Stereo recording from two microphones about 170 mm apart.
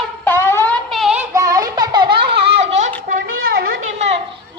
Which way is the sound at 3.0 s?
55° right (ahead or behind).